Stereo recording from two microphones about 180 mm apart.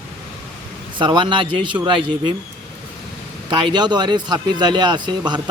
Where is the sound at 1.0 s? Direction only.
25° right (ahead or behind).